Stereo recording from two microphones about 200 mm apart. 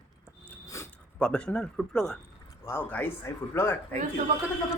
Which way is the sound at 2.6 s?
10° left (ahead or behind).